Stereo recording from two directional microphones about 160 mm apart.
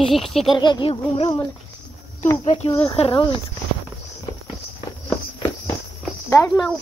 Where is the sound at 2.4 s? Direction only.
40° left (ahead or behind).